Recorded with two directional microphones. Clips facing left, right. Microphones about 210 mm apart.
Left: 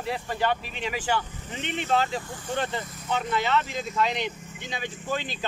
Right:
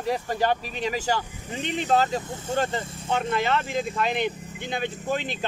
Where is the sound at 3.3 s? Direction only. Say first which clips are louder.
Even; 50° right (ahead or behind).